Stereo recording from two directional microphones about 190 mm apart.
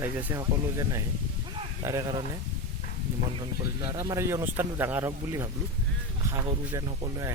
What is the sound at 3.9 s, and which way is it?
Speech, 15° right (ahead or behind).